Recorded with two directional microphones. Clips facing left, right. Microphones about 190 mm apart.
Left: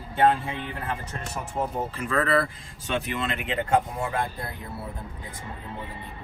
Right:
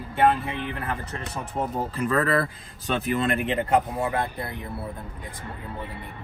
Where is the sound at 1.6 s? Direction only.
Centre (ahead or behind).